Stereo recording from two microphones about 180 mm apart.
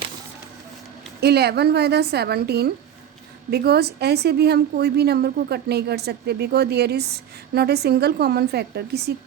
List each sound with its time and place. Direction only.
1.2 s a woman's voice: 65° right (ahead or behind)